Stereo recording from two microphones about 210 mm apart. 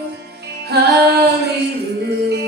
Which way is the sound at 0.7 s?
50° right (ahead or behind).